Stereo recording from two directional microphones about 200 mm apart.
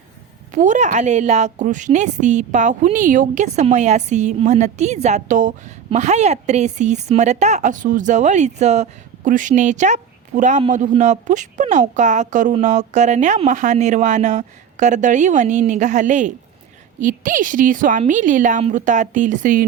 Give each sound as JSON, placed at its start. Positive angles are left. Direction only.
{"t": 0.5, "sound": "a woman's voice", "side_deg": -40}